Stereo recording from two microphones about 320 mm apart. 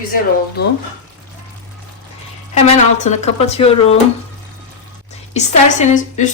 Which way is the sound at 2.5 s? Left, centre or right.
Left.